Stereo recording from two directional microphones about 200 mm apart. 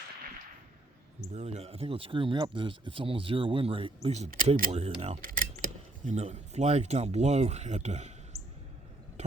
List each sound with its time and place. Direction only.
1.3 s speech: 35° right (ahead or behind)
5.2 s a sound: 45° right (ahead or behind)
6.1 s speech: 30° right (ahead or behind)